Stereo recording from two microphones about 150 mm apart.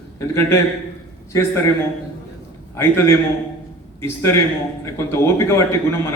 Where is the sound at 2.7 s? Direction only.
15° left (ahead or behind).